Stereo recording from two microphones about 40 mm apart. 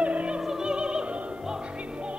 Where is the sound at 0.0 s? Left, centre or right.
Right.